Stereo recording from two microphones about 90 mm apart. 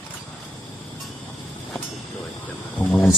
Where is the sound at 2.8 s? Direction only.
20° left (ahead or behind).